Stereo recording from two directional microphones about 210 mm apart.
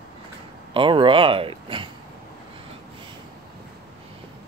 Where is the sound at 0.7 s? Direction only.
25° right (ahead or behind).